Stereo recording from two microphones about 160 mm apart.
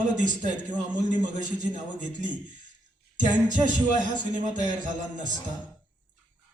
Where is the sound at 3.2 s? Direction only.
55° right (ahead or behind).